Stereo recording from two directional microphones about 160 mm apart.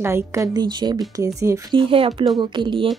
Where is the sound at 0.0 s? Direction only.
15° right (ahead or behind).